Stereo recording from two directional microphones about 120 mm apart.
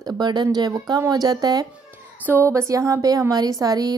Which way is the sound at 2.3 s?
20° right (ahead or behind).